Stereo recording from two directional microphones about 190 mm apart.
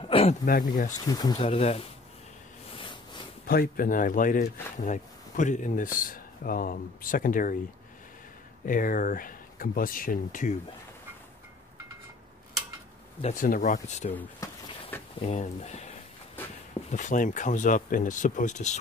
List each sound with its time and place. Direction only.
0.1 s a sound: 30° left (ahead or behind)
0.5 s speech: 45° left (ahead or behind)
0.9 s speech: 20° left (ahead or behind)
2.8 s a sound: 25° left (ahead or behind)
3.4 s speech: 50° left (ahead or behind)
8.6 s speech: 45° left (ahead or behind)
13.2 s speech: 45° left (ahead or behind)
14.1 s a sound: 10° left (ahead or behind)
15.2 s speech: 40° left (ahead or behind)
16.9 s speech: 40° left (ahead or behind)